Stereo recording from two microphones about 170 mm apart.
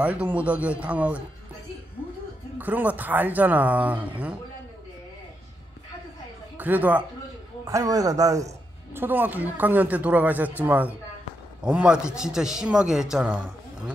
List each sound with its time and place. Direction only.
0.0 s speech: 10° right (ahead or behind)
2.6 s speech: 10° right (ahead or behind)
6.6 s speech: 10° right (ahead or behind)
7.6 s a man's voice: 20° right (ahead or behind)